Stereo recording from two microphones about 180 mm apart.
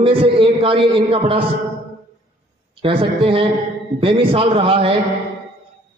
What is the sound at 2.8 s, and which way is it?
A man's voice, 30° right (ahead or behind).